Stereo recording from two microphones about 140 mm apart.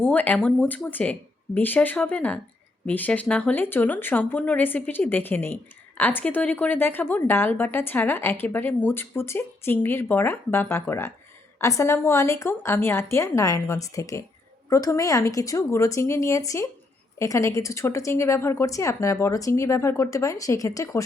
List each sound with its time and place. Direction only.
0.0 s a woman's voice: 10° left (ahead or behind)